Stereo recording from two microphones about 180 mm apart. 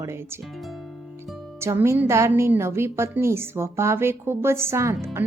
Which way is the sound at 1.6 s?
15° right (ahead or behind).